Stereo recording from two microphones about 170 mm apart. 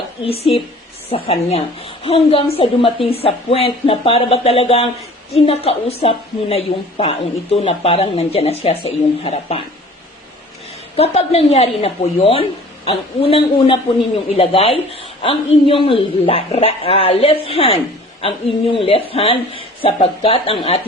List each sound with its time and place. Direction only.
0.3 s a woman's voice: 35° left (ahead or behind)
10.9 s a woman's voice: 35° left (ahead or behind)